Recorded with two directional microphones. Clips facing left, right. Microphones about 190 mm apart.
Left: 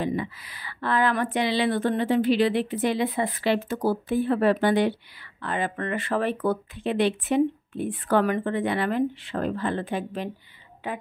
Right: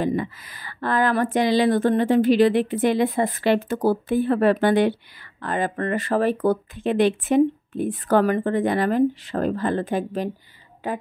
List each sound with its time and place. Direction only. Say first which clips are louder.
0.0 s speech: right 4 dB; 45° right (ahead or behind)
5.4 s a woman's voice: right 4 dB; 45° right (ahead or behind)